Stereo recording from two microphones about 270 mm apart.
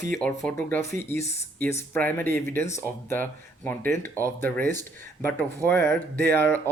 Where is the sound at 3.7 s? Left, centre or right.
Centre.